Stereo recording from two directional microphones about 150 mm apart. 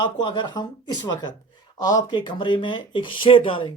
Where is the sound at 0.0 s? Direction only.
30° left (ahead or behind).